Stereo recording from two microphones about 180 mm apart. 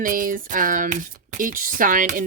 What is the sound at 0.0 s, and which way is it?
Speech, 50° right (ahead or behind).